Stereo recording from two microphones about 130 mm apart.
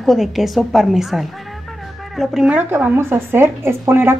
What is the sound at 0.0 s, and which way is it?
A woman's voice, centre (ahead or behind).